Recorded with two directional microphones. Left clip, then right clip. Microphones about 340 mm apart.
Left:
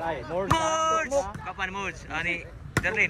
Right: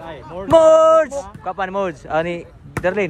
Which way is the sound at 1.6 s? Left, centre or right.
Centre.